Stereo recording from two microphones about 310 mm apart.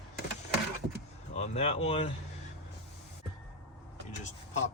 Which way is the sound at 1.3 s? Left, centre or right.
Centre.